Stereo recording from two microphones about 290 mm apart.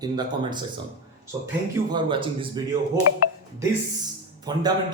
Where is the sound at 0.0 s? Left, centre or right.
Centre.